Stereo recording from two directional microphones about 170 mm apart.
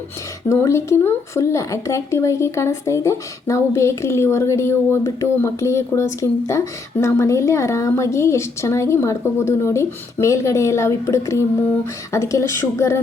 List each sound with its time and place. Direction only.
0.4 s speech: 15° left (ahead or behind)